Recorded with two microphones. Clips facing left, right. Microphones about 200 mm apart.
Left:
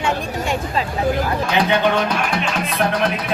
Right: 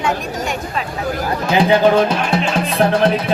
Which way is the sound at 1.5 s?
30° right (ahead or behind).